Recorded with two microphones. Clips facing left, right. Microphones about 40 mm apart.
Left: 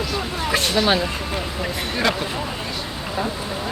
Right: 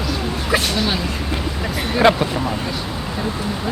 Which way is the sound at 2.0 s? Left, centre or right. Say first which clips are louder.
Right 8 dB; centre.